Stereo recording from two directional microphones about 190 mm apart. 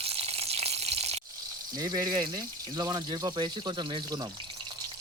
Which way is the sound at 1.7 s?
20° right (ahead or behind).